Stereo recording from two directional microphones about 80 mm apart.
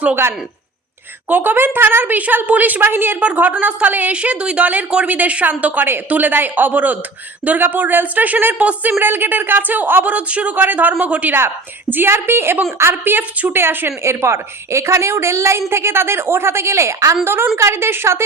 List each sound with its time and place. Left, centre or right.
1.3 s a woman's voice: right
17.2 s a woman's voice: right